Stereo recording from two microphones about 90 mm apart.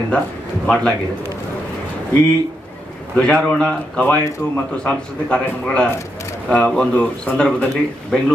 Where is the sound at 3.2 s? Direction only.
10° left (ahead or behind).